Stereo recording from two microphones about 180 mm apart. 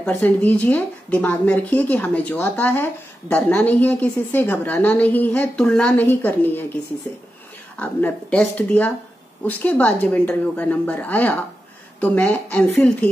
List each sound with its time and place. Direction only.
0.0 s speech: 10° left (ahead or behind)
7.8 s speech: 10° left (ahead or behind)